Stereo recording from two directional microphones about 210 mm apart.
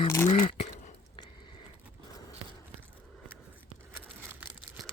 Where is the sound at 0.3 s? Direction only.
35° left (ahead or behind).